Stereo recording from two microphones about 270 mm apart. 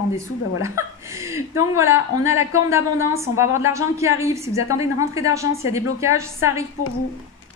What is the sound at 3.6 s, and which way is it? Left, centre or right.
A woman's voice, centre.